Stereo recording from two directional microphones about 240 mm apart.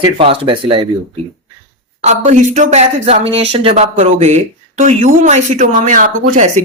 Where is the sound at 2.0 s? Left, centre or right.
Right.